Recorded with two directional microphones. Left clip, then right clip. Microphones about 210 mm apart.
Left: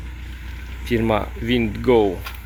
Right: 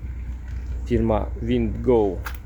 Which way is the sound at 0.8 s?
15° right (ahead or behind).